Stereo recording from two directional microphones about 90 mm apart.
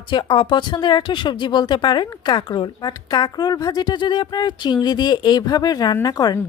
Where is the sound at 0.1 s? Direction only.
70° left (ahead or behind).